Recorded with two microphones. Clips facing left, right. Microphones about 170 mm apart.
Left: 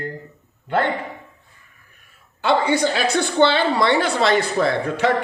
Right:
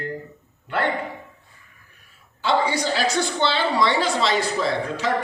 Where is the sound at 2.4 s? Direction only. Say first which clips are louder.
Left 4 dB; 55° left (ahead or behind).